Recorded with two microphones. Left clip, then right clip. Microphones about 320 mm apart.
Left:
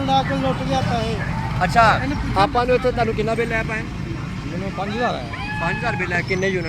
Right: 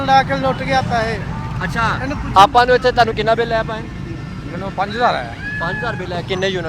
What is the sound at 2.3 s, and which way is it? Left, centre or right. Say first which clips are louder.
Speech: right 9 dB; right.